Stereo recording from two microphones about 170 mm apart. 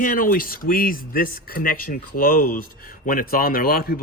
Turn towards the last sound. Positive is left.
turn(degrees=60)  # may be behind; listen again after turning